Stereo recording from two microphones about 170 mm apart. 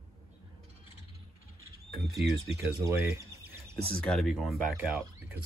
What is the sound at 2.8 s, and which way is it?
Speech, 15° right (ahead or behind).